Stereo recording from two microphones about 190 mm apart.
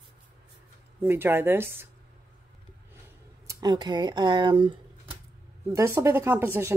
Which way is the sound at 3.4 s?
20° right (ahead or behind).